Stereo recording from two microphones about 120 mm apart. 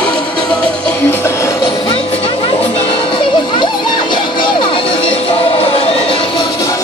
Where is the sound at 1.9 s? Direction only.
55° left (ahead or behind).